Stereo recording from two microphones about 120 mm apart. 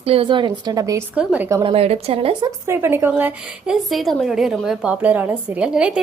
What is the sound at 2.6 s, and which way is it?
Speech, 20° right (ahead or behind).